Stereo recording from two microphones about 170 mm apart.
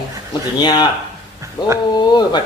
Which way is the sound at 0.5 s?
25° left (ahead or behind).